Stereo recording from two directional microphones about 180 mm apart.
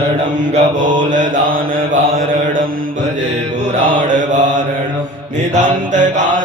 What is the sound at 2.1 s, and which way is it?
Mantra, 90° right.